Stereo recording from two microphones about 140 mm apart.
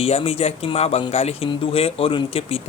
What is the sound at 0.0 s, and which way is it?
Speech, 45° left (ahead or behind).